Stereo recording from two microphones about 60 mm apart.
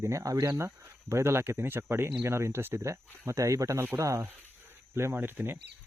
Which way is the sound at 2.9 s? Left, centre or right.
Right.